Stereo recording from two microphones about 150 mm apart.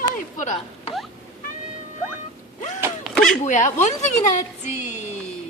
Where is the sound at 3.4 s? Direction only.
50° left (ahead or behind).